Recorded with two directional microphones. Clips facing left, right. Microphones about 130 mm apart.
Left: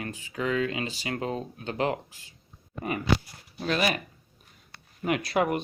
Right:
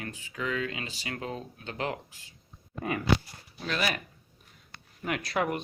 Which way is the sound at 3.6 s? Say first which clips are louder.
Left 4 dB; 20° left (ahead or behind).